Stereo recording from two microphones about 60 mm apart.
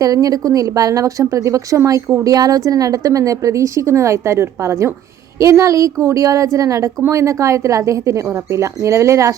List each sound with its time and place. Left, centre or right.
0.0 s a woman's voice: right
2.2 s a woman's voice: right